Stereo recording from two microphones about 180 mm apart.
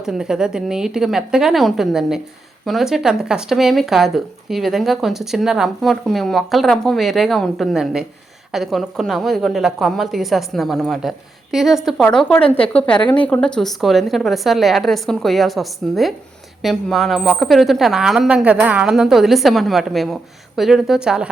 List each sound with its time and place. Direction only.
0.0 s speech: 5° right (ahead or behind)
12.0 s a woman's voice: 10° left (ahead or behind)
12.4 s speech: 30° left (ahead or behind)
12.7 s a woman's voice: 5° left (ahead or behind)